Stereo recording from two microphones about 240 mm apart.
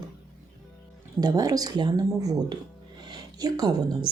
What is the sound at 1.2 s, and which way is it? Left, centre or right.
Speech, centre.